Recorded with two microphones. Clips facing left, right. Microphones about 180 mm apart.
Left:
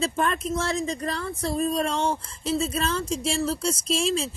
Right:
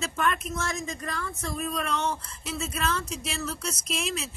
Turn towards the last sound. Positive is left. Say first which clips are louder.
# left 7 dB
turn(degrees=30)  # may be behind; listen again after turning